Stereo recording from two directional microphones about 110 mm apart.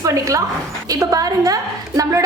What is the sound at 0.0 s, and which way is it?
A woman's voice, 30° right (ahead or behind).